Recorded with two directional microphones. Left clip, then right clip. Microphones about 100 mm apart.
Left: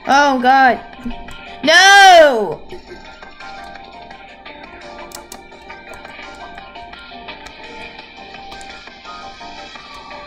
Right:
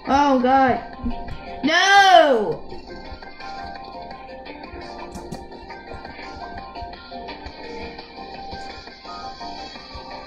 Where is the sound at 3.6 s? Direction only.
Centre (ahead or behind).